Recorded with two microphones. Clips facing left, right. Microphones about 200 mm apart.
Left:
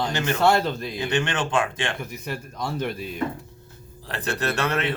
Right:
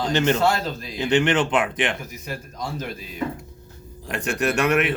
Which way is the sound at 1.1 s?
20° right (ahead or behind).